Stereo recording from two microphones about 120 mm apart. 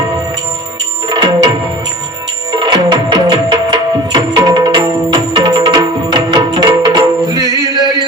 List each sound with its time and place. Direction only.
1.0 s music: 35° right (ahead or behind)
2.5 s music: 40° right (ahead or behind)